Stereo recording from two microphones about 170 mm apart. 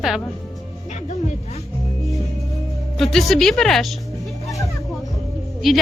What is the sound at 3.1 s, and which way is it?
Speech, centre (ahead or behind).